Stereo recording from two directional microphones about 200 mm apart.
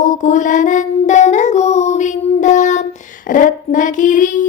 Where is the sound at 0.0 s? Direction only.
40° left (ahead or behind).